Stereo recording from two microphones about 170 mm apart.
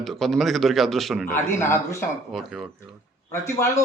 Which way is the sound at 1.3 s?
15° left (ahead or behind).